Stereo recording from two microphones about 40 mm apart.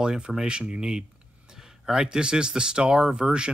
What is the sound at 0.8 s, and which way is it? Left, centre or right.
Speech, centre.